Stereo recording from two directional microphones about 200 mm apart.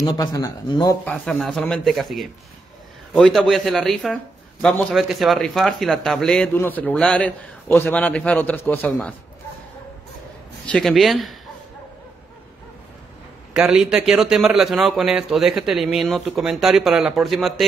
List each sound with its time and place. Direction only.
0.0 s speech: 20° left (ahead or behind)
1.0 s speech: 5° left (ahead or behind)
10.7 s speech: centre (ahead or behind)
13.5 s speech: 5° right (ahead or behind)